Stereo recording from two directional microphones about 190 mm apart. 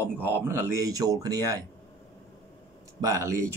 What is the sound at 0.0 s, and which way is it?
Speech, 10° right (ahead or behind).